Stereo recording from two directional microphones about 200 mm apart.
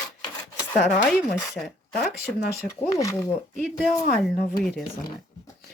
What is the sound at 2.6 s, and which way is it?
Speech, 15° left (ahead or behind).